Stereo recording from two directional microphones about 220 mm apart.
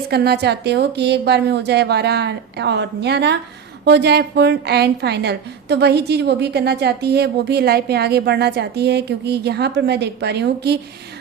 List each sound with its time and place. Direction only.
0.1 s a woman's voice: 45° right (ahead or behind)